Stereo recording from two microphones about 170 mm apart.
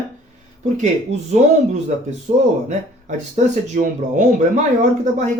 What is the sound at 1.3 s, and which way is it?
Speech, 40° right (ahead or behind).